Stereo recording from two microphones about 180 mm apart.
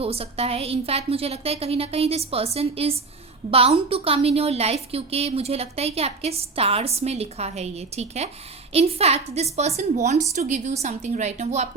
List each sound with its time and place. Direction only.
0.0 s a woman's voice: 35° right (ahead or behind)